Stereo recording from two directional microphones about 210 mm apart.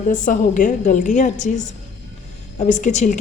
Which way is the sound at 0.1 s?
40° left (ahead or behind).